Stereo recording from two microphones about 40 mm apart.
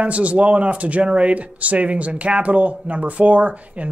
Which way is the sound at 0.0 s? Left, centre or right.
Right.